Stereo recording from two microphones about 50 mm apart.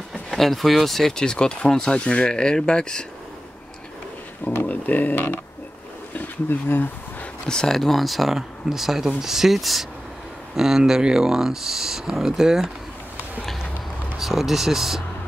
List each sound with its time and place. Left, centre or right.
0.1 s speech: centre
4.6 s speech: left
7.4 s speech: centre
14.1 s speech: centre